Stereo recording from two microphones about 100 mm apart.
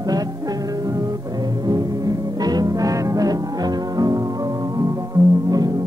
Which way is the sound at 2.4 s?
40° right (ahead or behind).